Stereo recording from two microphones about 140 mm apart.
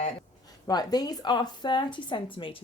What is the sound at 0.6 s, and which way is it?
Speech, 30° left (ahead or behind).